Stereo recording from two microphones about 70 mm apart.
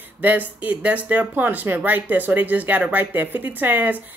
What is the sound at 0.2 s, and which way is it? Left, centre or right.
Speech, right.